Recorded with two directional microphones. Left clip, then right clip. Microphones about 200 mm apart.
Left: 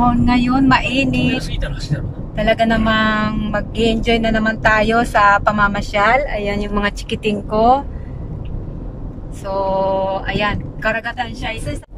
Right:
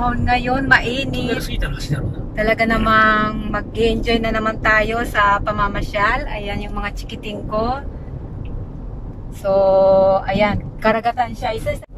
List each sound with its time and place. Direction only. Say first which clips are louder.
0.0 s speech: left 2 dB; centre (ahead or behind)
2.3 s speech: left 2 dB; 15° left (ahead or behind); by 7.3 s 40° left (ahead or behind)
7.5 s speech: left 8 dB; 25° left (ahead or behind)
9.5 s mantra: right 5 dB; 20° right (ahead or behind)
9.9 s speech: right 5 dB; 5° left (ahead or behind)
10.8 s mantra: right 4 dB; 25° right (ahead or behind)
11.1 s speech: right 3 dB; 5° left (ahead or behind)